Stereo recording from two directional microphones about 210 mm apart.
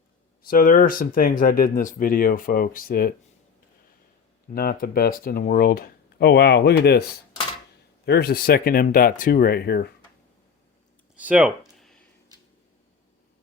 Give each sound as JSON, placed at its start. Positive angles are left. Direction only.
{"t": 0.4, "sound": "speech", "side_deg": 40}
{"t": 4.5, "sound": "speech", "side_deg": 45}
{"t": 8.0, "sound": "speech", "side_deg": 50}
{"t": 11.2, "sound": "speech", "side_deg": -5}
{"t": 11.8, "sound": "a sound", "side_deg": 0}